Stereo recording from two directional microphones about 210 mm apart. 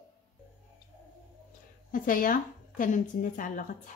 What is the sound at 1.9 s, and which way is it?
A woman's voice, 40° left (ahead or behind).